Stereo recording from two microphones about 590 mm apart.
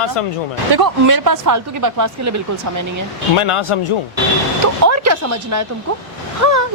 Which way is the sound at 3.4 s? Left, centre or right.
Left.